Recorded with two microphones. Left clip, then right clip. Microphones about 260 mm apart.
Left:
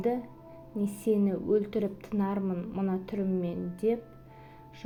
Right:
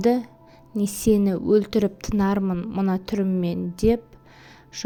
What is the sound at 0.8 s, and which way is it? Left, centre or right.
A woman's voice, right.